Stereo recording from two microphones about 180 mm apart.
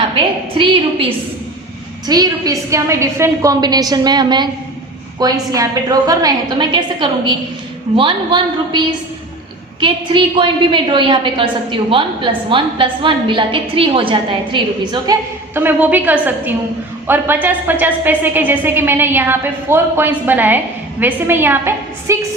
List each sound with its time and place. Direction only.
0.5 s a woman's voice: 30° right (ahead or behind)
2.0 s a woman's voice: 20° right (ahead or behind)
9.8 s a woman's voice: 25° right (ahead or behind)
15.5 s a woman's voice: 10° right (ahead or behind)